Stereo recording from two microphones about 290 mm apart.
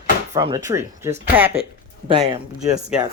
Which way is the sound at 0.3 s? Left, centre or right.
Centre.